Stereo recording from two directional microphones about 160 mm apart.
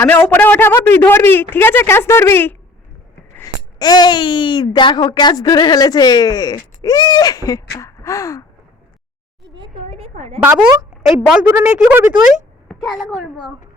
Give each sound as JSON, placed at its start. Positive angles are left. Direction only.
{"t": 0.0, "sound": "speech", "side_deg": 10}
{"t": 10.0, "sound": "a sound", "side_deg": -40}
{"t": 10.4, "sound": "a woman's voice", "side_deg": -15}
{"t": 12.6, "sound": "a woman's voice", "side_deg": 0}